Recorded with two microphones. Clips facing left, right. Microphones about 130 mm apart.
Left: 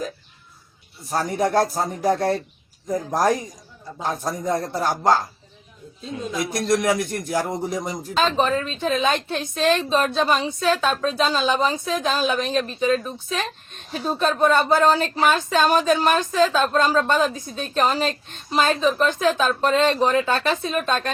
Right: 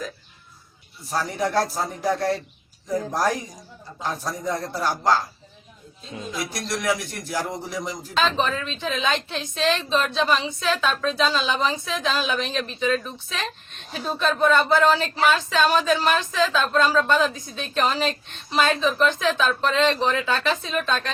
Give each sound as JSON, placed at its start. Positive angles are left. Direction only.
{"t": 1.1, "sound": "a woman's voice", "side_deg": 50}
{"t": 2.8, "sound": "a woman's voice", "side_deg": 20}
{"t": 4.5, "sound": "a woman's voice", "side_deg": 25}
{"t": 4.8, "sound": "a woman's voice", "side_deg": 50}
{"t": 6.3, "sound": "a woman's voice", "side_deg": 50}
{"t": 7.3, "sound": "a woman's voice", "side_deg": 25}
{"t": 8.1, "sound": "a woman's voice", "side_deg": 40}